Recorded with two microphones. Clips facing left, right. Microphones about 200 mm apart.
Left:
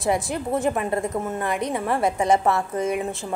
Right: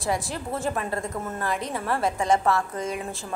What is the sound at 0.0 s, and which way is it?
A woman's voice, 20° left (ahead or behind).